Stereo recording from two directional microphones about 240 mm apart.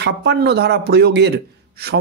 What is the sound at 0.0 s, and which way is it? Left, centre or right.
A man's voice, right.